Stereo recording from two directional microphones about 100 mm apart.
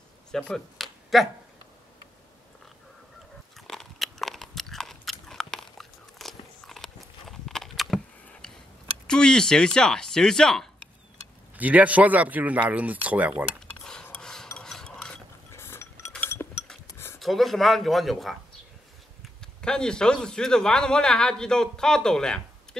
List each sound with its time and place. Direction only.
0.3 s speech: 10° left (ahead or behind)
3.5 s biting: 5° left (ahead or behind)
8.3 s a sound: 10° left (ahead or behind)
9.0 s speech: 5° left (ahead or behind)
11.5 s speech: 15° right (ahead or behind)
14.1 s filing: 5° left (ahead or behind)
15.5 s a sound: 25° left (ahead or behind)
17.2 s a man's voice: centre (ahead or behind)